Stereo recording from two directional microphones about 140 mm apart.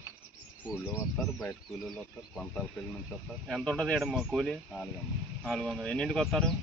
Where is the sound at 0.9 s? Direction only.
10° left (ahead or behind).